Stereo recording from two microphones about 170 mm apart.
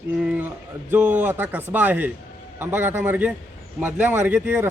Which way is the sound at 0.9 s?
10° right (ahead or behind).